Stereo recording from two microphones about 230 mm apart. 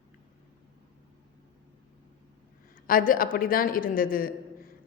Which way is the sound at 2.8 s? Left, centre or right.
Left.